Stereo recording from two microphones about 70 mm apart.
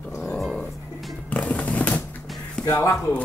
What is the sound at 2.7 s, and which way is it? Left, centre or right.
Speech, left.